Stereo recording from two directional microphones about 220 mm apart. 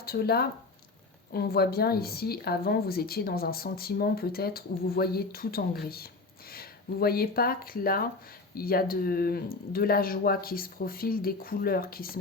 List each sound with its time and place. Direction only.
0.0 s a woman's voice: 45° left (ahead or behind)